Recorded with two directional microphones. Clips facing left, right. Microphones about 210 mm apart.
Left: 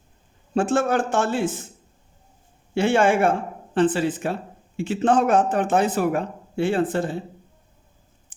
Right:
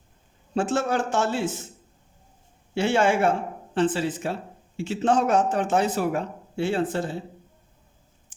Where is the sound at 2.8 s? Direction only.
50° left (ahead or behind).